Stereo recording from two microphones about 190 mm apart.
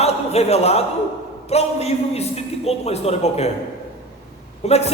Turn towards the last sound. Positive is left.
turn(degrees=35)  # may be behind; listen again after turning